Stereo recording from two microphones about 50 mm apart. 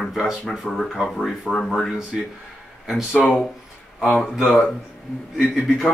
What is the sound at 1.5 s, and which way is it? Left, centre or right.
Speech, centre.